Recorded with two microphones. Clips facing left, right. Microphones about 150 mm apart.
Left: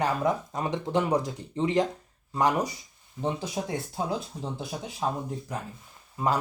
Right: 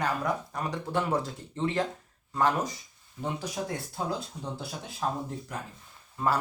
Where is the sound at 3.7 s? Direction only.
20° left (ahead or behind).